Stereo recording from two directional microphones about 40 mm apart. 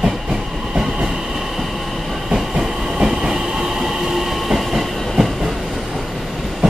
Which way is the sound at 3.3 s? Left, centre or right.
Centre.